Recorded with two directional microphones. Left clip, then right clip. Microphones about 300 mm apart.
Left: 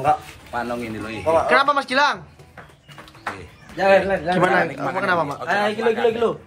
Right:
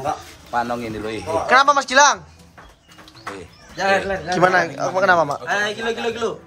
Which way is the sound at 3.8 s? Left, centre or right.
Centre.